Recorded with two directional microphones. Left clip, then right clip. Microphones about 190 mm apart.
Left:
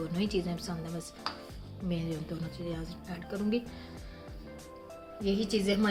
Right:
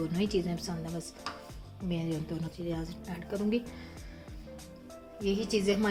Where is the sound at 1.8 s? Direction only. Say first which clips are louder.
Right 1 dB; 15° right (ahead or behind).